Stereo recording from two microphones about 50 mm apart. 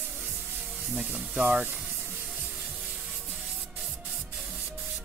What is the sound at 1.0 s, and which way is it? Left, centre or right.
Speech, right.